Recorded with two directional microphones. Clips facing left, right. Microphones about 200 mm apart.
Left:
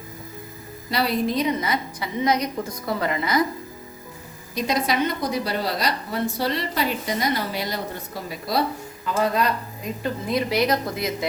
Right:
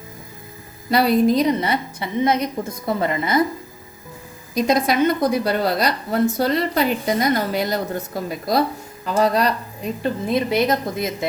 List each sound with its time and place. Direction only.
0.9 s a woman's voice: 50° right (ahead or behind)
1.6 s a woman's voice: 30° right (ahead or behind)
4.5 s a woman's voice: 45° right (ahead or behind)
10.0 s a woman's voice: 25° right (ahead or behind)